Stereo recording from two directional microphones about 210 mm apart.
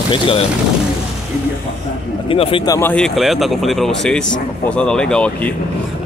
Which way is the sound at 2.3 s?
25° left (ahead or behind).